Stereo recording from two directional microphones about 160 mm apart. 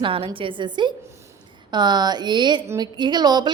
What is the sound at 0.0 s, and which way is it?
A woman's voice, 35° right (ahead or behind).